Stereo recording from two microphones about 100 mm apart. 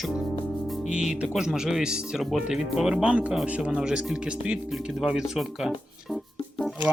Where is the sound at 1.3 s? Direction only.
5° right (ahead or behind).